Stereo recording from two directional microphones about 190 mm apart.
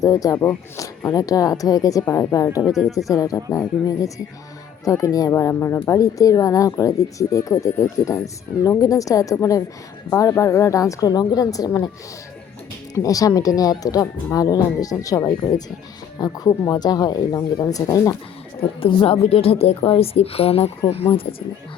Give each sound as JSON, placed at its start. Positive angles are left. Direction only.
{"t": 0.0, "sound": "speech", "side_deg": 20}
{"t": 4.9, "sound": "speech", "side_deg": 15}
{"t": 12.9, "sound": "speech", "side_deg": 20}
{"t": 18.8, "sound": "a woman's voice", "side_deg": 30}